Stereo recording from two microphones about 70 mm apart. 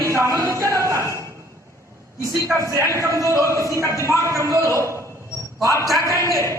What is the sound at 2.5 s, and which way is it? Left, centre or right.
A man's voice, right.